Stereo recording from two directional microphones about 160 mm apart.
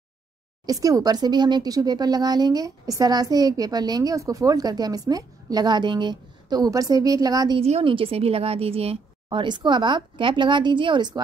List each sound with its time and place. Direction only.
0.7 s speech: 20° right (ahead or behind)
7.6 s a woman's voice: 35° right (ahead or behind)